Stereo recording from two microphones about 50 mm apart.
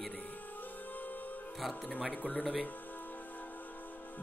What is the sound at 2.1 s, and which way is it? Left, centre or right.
Speech, left.